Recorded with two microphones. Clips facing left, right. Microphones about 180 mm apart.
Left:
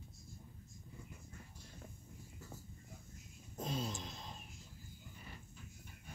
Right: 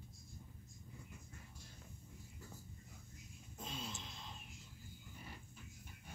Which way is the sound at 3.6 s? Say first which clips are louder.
Left 8 dB; 40° left (ahead or behind).